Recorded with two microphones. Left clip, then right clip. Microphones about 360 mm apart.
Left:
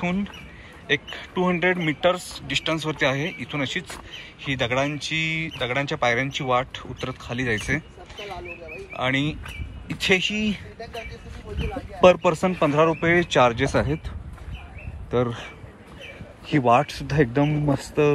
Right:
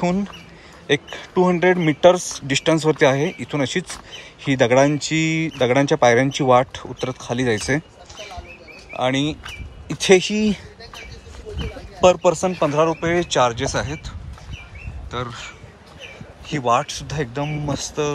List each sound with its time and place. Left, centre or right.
0.0 s speech: centre
8.9 s speech: centre
12.0 s speech: centre